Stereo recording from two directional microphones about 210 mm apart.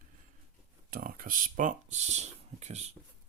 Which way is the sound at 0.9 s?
40° right (ahead or behind).